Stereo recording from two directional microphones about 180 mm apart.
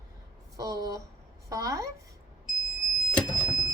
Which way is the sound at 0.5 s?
20° right (ahead or behind).